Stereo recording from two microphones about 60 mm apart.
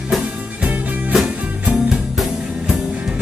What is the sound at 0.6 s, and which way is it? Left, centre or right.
Music, centre.